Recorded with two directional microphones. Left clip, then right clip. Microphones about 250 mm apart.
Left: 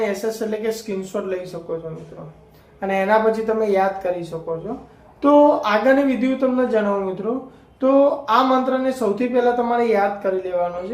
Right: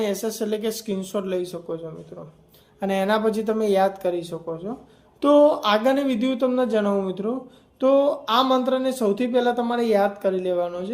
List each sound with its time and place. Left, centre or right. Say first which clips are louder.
0.0 s speech: left 3 dB; right